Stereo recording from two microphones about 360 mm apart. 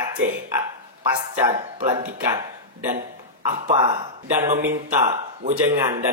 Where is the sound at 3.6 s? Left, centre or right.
Centre.